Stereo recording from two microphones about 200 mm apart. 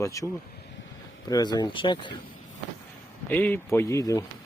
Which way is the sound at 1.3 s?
20° left (ahead or behind).